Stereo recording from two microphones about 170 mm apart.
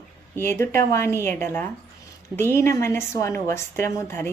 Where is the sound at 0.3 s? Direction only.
15° left (ahead or behind).